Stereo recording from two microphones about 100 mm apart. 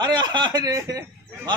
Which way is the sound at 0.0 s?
45° right (ahead or behind).